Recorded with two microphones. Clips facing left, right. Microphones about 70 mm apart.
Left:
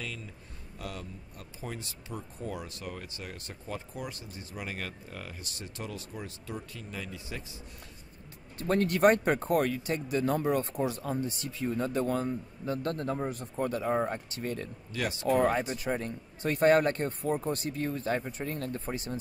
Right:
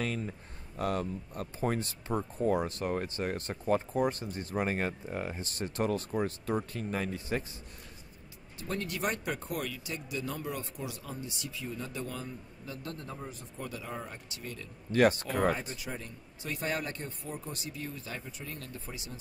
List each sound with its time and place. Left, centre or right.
0.0 s speech: right
5.5 s speech: right
8.5 s speech: left
14.9 s speech: right
15.7 s speech: left